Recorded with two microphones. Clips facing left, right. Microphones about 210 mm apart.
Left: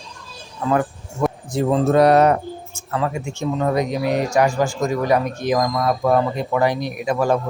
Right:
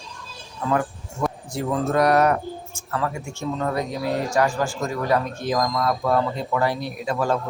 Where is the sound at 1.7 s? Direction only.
25° left (ahead or behind).